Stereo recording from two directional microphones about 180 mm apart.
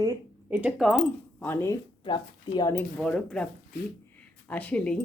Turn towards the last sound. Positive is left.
turn(degrees=5)  # may be behind; listen again after turning